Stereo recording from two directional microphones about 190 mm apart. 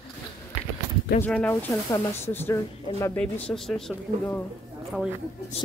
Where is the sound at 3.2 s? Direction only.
5° left (ahead or behind).